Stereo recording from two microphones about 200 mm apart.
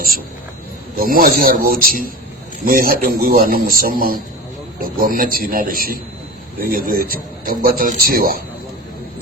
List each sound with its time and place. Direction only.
0.9 s speech: 45° right (ahead or behind)